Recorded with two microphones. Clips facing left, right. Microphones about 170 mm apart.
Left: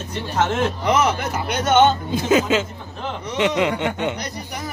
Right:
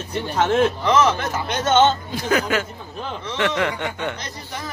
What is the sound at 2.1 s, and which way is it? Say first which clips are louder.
Speech: left 3 dB; 20° left (ahead or behind).